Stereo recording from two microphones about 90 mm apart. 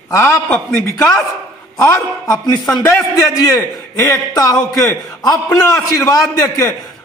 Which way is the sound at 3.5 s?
40° left (ahead or behind).